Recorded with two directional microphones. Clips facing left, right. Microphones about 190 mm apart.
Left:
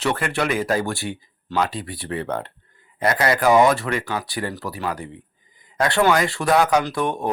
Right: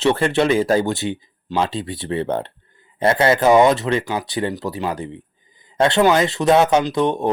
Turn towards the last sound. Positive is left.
turn(degrees=-20)  # may be behind; listen again after turning